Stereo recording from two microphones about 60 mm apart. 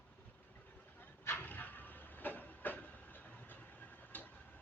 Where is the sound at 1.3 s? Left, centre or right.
Left.